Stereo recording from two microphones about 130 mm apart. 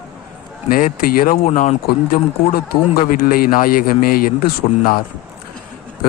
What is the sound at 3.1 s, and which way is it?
Speech, 90° left.